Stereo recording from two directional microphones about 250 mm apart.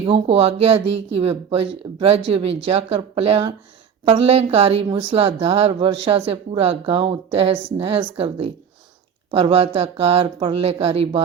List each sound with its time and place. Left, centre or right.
0.0 s a woman's voice: right